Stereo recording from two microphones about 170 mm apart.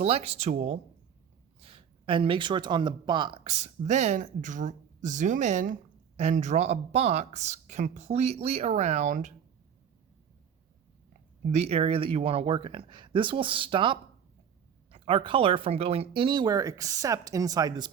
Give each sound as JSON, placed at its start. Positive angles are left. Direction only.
{"t": 0.0, "sound": "speech", "side_deg": -35}
{"t": 11.5, "sound": "speech", "side_deg": -40}